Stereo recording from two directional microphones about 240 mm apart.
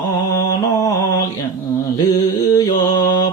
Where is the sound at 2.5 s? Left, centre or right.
Centre.